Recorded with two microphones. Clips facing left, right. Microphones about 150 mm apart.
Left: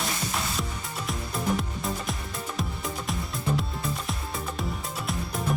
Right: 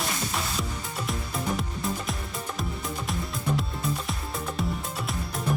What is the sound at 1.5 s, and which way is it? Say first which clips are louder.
Music: even; centre (ahead or behind).